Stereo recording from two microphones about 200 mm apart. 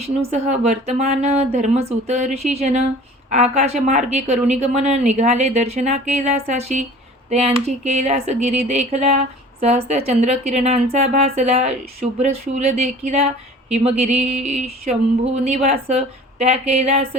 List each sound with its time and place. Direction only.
0.2 s speech: 35° right (ahead or behind)